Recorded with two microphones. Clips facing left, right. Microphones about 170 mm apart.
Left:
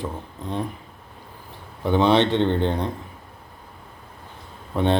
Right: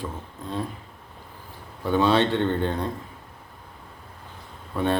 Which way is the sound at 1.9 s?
20° left (ahead or behind).